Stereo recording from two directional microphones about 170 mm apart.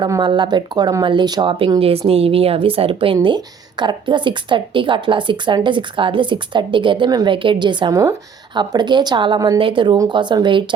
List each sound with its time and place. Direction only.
0.0 s speech: 25° right (ahead or behind)